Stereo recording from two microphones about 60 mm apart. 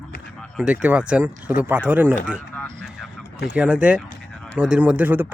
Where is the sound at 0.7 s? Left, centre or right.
Right.